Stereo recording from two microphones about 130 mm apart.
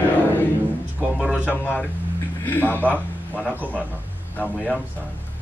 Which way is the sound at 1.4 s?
15° left (ahead or behind).